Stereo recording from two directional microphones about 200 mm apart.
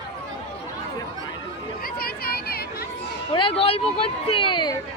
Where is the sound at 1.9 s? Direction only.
50° left (ahead or behind).